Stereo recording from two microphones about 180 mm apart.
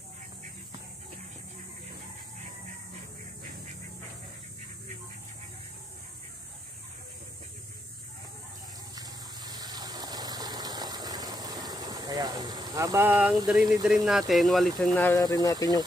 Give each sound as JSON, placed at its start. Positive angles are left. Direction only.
{"t": 8.9, "sound": "water", "side_deg": -20}
{"t": 13.5, "sound": "speech", "side_deg": 0}
{"t": 15.2, "sound": "speech", "side_deg": 20}